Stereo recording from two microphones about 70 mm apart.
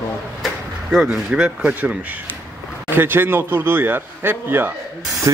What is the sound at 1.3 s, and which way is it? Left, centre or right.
Speech, centre.